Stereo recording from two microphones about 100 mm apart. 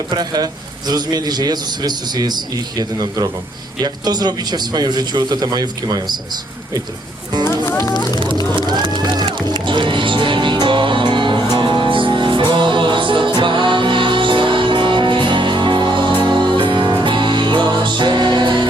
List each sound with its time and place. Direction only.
0.1 s a man's voice: 40° right (ahead or behind)
7.9 s speech: 45° left (ahead or behind)
8.7 s music: 45° right (ahead or behind)